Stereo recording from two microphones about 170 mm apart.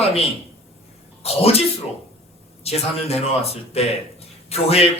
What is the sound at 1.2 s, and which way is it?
Speech, 35° left (ahead or behind).